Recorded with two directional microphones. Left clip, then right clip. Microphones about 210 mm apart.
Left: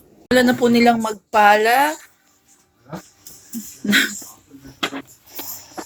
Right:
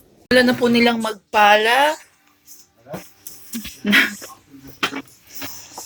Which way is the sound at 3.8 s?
10° left (ahead or behind).